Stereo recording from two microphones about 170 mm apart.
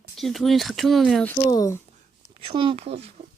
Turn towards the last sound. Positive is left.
turn(degrees=-40)  # may be behind; listen again after turning